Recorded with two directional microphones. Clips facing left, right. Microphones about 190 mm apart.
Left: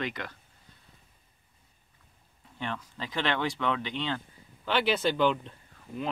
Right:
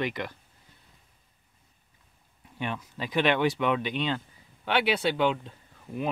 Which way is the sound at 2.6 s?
15° right (ahead or behind).